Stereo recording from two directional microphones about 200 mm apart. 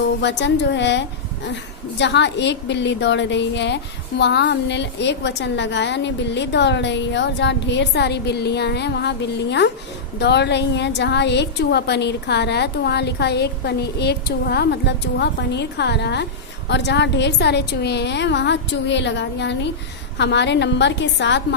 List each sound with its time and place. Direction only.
0.2 s a woman's voice: 60° left (ahead or behind)